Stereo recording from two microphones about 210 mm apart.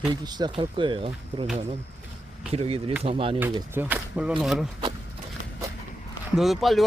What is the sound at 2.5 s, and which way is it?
Speech, 30° right (ahead or behind).